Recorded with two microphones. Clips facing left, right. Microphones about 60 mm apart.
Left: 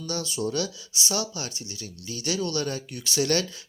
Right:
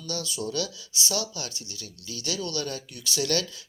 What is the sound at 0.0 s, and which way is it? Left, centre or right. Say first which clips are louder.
Speech: left 3 dB; left.